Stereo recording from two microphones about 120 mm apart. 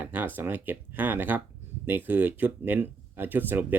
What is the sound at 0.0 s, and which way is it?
Speech, 15° right (ahead or behind).